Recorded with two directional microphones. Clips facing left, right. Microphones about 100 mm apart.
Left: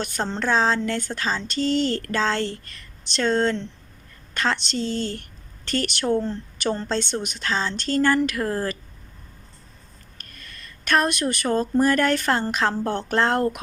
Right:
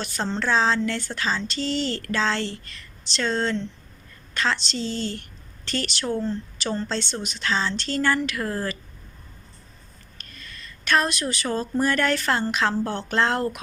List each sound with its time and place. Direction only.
0.3 s speech: 45° left (ahead or behind)
10.2 s a sound: 50° left (ahead or behind)
11.5 s speech: 50° left (ahead or behind)